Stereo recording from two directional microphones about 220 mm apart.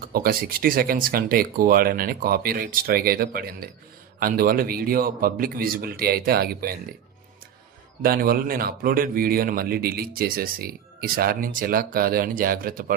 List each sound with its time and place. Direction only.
0.0 s speech: 40° right (ahead or behind)
8.0 s speech: 40° right (ahead or behind)